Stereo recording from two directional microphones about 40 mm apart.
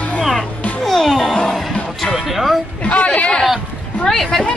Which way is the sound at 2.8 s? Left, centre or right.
Left.